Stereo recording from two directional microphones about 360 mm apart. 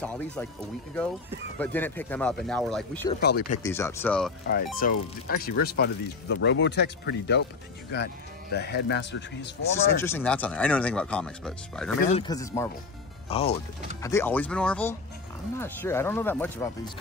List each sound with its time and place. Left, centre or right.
0.0 s speech: centre
3.2 s speech: left
3.5 s speech: centre
4.8 s speech: left
10.0 s speech: centre
12.0 s speech: centre